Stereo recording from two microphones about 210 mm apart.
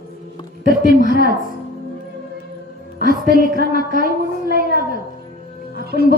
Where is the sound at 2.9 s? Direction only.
45° right (ahead or behind).